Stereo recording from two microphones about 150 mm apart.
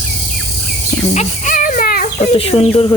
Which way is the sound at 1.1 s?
55° left (ahead or behind).